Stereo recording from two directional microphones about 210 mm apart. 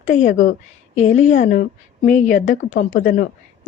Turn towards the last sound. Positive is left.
turn(degrees=40)  # may be behind; listen again after turning